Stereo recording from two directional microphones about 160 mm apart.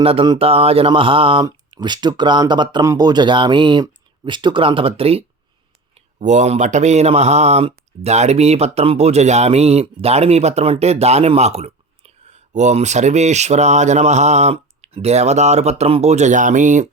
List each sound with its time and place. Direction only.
0.0 s mantra: 35° right (ahead or behind)
1.5 s speech: 25° right (ahead or behind)
6.1 s speech: 45° right (ahead or behind)